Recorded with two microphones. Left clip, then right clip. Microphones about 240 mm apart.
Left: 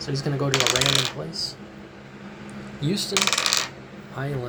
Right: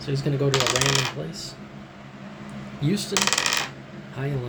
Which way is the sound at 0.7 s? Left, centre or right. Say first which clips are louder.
Left 1 dB; centre.